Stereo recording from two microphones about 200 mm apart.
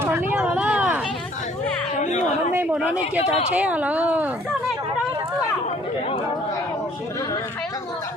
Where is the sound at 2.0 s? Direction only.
40° left (ahead or behind).